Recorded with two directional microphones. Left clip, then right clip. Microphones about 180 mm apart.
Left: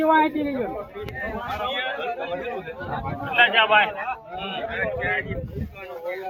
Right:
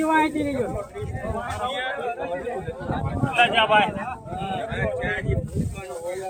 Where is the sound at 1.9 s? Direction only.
55° right (ahead or behind).